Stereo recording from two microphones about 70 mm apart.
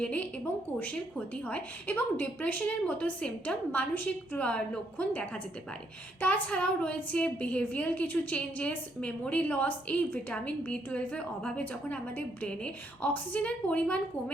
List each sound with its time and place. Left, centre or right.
0.0 s a woman's voice: centre